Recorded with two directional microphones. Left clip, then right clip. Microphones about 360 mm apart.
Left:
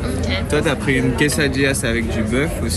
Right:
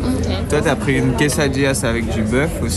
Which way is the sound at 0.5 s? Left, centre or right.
Right.